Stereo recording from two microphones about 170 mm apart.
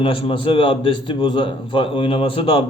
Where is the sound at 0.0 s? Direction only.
30° left (ahead or behind).